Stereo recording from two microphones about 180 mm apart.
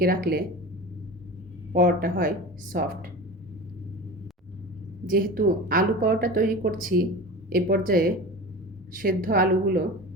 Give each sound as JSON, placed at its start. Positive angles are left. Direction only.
{"t": 0.0, "sound": "speech", "side_deg": -55}
{"t": 1.7, "sound": "speech", "side_deg": -55}
{"t": 5.0, "sound": "speech", "side_deg": -50}